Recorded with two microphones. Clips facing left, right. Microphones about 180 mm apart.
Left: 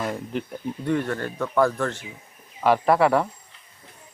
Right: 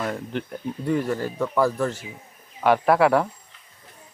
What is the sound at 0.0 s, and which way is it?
Speech, 5° left (ahead or behind).